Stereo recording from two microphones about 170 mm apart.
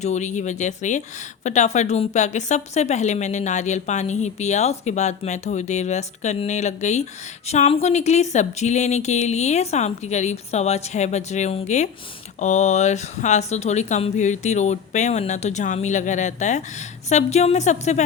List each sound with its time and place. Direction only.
0.0 s a woman's voice: 45° left (ahead or behind)